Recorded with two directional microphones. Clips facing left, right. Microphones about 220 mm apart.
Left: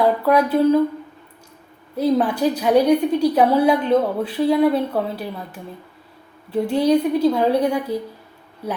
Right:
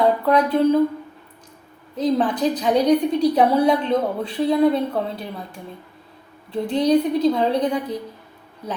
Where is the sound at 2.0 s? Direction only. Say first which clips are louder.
Left 2 dB; 10° left (ahead or behind).